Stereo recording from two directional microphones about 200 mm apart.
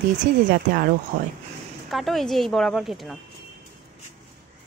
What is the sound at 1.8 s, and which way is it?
Speech, centre (ahead or behind).